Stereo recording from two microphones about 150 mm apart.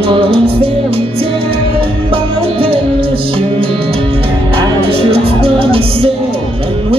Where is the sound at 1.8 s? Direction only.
35° right (ahead or behind).